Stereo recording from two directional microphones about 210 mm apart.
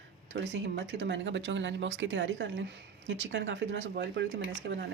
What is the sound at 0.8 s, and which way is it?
Speech, 55° right (ahead or behind).